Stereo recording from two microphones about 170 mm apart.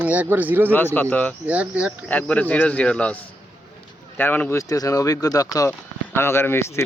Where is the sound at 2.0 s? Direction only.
10° left (ahead or behind).